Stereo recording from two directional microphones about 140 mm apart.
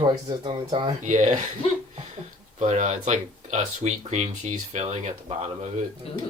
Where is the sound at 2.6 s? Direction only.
55° right (ahead or behind).